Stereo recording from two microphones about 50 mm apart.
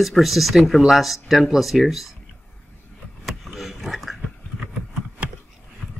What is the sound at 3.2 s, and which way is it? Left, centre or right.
Roaring cats, centre.